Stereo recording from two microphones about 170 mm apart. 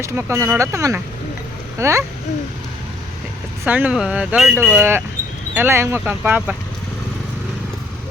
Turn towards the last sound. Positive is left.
turn(degrees=-10)  # may be behind; listen again after turning